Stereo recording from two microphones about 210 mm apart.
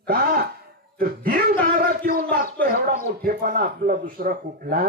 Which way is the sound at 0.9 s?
45° right (ahead or behind).